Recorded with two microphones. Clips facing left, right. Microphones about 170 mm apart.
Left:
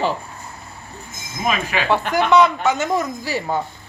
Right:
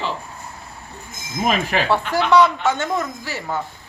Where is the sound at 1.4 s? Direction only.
40° right (ahead or behind).